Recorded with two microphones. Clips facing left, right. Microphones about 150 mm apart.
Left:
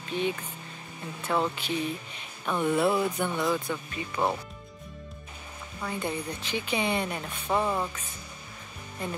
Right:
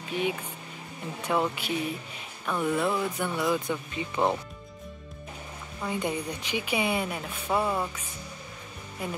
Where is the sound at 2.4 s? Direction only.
Centre (ahead or behind).